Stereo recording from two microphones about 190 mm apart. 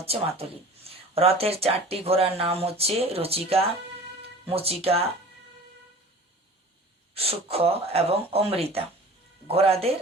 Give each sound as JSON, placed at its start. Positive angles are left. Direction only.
{"t": 0.0, "sound": "speech", "side_deg": -30}
{"t": 7.1, "sound": "speech", "side_deg": -30}